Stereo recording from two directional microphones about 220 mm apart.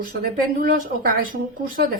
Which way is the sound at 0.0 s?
40° right (ahead or behind).